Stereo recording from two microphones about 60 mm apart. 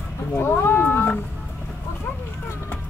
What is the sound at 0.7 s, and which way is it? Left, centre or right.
Cat, left.